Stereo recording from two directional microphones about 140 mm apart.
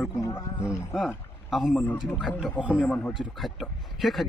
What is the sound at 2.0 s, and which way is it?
Speech, 5° right (ahead or behind).